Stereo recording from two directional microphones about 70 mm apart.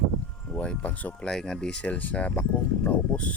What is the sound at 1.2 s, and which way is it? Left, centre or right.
Speech, centre.